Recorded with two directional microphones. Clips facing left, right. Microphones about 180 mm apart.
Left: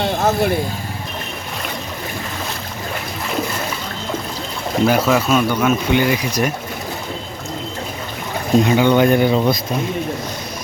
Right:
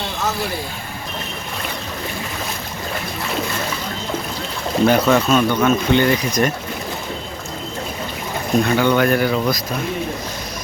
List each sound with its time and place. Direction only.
0.0 s vehicle: 55° left (ahead or behind)
4.9 s speech: 5° left (ahead or behind)
8.6 s speech: 15° left (ahead or behind)